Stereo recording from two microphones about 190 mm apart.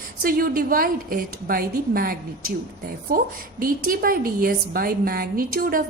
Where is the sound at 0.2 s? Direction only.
50° right (ahead or behind).